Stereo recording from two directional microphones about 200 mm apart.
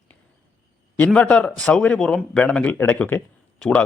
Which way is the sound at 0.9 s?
5° left (ahead or behind).